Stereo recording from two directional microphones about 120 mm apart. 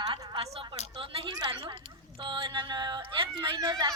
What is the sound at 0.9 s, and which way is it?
A woman's voice, 45° right (ahead or behind).